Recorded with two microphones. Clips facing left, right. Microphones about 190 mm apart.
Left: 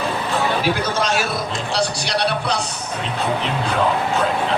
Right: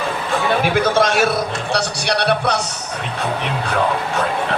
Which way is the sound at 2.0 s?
60° right (ahead or behind).